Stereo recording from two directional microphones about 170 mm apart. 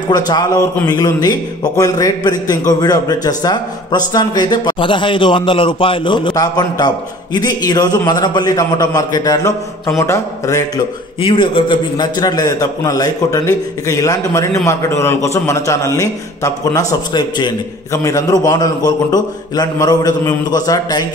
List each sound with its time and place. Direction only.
0.1 s a man's voice: 20° left (ahead or behind)
11.1 s a man's voice: 30° left (ahead or behind)